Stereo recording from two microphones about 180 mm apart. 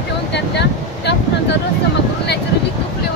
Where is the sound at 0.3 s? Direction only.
70° left (ahead or behind).